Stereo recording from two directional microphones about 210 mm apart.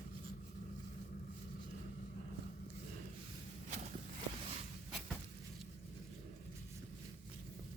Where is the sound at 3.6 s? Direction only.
35° right (ahead or behind).